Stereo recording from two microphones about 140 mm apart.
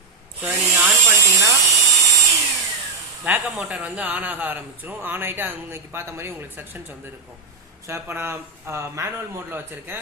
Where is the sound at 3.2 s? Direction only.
10° right (ahead or behind).